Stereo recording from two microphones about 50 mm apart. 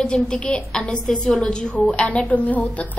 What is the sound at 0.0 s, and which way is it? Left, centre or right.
A woman's voice, centre.